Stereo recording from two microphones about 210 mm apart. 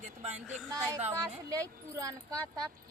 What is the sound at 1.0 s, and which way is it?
Speech, 15° right (ahead or behind).